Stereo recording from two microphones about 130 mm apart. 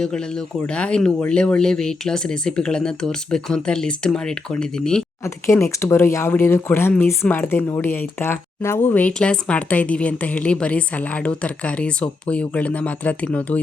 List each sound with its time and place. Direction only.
0.0 s speech: 5° left (ahead or behind)
5.2 s speech: 20° left (ahead or behind)